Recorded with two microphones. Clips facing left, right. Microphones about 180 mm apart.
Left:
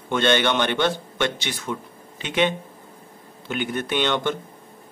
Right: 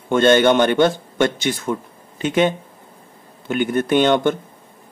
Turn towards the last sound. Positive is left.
turn(degrees=-45)  # may be behind; listen again after turning